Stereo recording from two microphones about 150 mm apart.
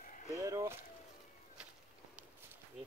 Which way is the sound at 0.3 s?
20° right (ahead or behind).